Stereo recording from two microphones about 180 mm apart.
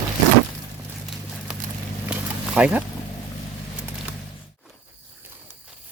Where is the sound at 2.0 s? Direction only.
10° right (ahead or behind).